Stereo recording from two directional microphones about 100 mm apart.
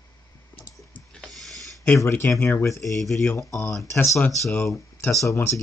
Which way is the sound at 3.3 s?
30° left (ahead or behind).